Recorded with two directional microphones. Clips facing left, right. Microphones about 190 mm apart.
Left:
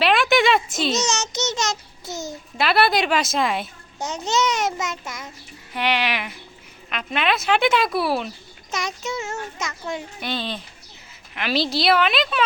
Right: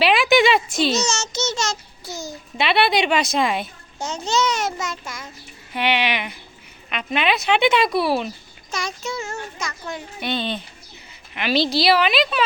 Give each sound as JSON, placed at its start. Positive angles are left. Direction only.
{"t": 0.0, "sound": "a sound", "side_deg": 0}
{"t": 1.0, "sound": "child singing", "side_deg": 15}
{"t": 2.6, "sound": "speech", "side_deg": 0}
{"t": 3.9, "sound": "a child's voice", "side_deg": 20}
{"t": 5.7, "sound": "speech", "side_deg": 0}
{"t": 8.7, "sound": "a child's voice", "side_deg": 20}
{"t": 10.2, "sound": "speech", "side_deg": 0}